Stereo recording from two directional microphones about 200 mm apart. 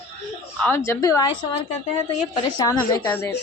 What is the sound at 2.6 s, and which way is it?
Speech, 15° left (ahead or behind).